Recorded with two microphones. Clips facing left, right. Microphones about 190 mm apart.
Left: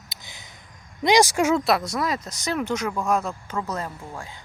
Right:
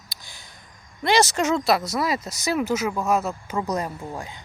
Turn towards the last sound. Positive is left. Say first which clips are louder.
# right 4 dB
turn(degrees=-20)  # may be behind; listen again after turning